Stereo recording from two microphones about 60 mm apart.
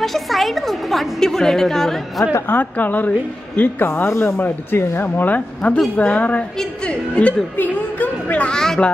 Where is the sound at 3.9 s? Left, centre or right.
Left.